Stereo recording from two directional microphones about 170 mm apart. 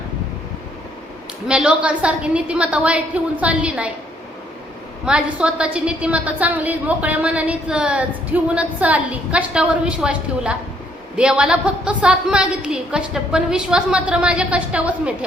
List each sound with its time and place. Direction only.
1.5 s a woman's voice: 5° right (ahead or behind)
5.0 s a woman's voice: 5° right (ahead or behind)